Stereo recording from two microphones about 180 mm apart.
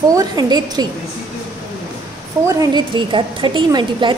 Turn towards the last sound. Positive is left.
turn(degrees=-25)  # may be behind; listen again after turning